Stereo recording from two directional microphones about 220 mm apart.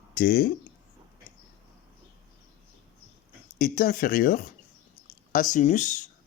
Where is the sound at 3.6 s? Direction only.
40° left (ahead or behind).